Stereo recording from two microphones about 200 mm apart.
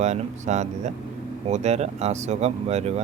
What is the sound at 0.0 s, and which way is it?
Speech, 35° right (ahead or behind).